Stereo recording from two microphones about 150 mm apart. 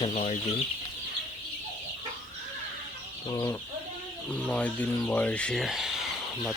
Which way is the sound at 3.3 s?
25° left (ahead or behind).